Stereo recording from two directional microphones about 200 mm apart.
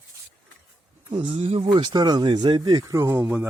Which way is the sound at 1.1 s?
30° right (ahead or behind).